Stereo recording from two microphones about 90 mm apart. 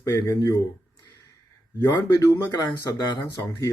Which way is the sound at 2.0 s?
35° left (ahead or behind).